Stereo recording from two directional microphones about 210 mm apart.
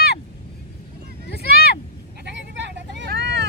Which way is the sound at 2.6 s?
55° right (ahead or behind).